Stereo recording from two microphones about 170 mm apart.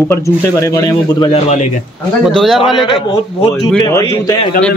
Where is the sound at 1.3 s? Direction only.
40° left (ahead or behind).